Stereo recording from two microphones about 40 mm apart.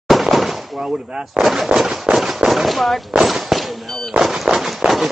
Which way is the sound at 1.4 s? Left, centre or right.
Centre.